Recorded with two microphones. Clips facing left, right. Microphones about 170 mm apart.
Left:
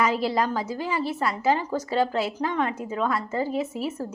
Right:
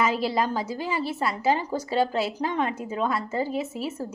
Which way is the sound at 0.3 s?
25° right (ahead or behind).